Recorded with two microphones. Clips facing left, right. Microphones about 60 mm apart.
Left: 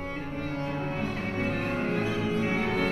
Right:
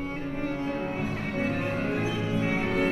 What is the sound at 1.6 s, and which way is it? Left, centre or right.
Music, centre.